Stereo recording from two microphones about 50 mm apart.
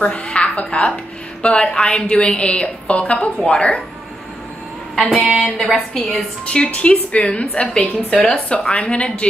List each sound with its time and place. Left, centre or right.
0.0 s a woman's voice: left
4.9 s a sound: centre
5.6 s a woman's voice: centre
6.1 s a woman's voice: left